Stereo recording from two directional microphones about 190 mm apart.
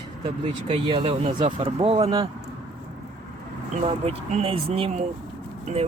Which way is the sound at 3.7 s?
35° right (ahead or behind).